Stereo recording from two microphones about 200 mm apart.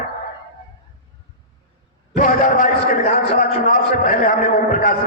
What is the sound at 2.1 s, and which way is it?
A man's voice, 40° left (ahead or behind).